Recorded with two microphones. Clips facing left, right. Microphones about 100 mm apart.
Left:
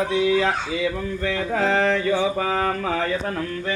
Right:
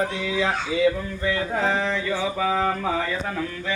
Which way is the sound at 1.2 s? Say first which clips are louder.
Left 2 dB; 85° left.